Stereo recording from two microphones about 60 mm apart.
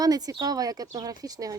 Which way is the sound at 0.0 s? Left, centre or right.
Right.